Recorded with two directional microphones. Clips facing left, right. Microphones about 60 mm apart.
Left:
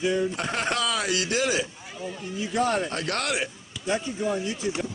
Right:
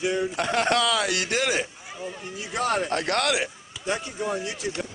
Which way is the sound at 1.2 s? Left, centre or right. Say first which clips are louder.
Even; right.